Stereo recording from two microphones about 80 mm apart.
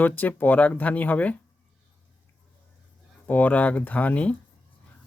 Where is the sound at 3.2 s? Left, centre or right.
Left.